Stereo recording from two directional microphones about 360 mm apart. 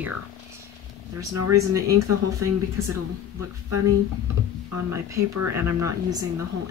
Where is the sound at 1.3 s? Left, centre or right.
Right.